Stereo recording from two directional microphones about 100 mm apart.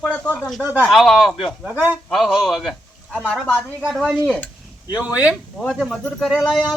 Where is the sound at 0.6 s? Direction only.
20° right (ahead or behind).